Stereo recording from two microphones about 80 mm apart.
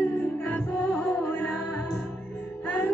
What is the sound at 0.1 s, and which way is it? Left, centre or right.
Music, centre.